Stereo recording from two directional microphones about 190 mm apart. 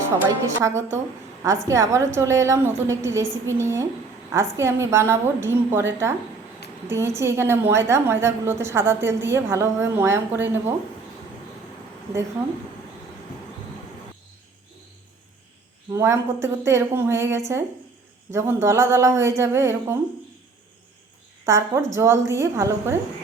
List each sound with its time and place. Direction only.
0.4 s a woman's voice: 15° right (ahead or behind)
15.9 s a woman's voice: 15° right (ahead or behind)
21.4 s a woman's voice: 15° right (ahead or behind)